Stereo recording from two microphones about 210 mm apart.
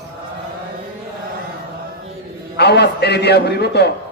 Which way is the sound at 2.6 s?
50° left (ahead or behind).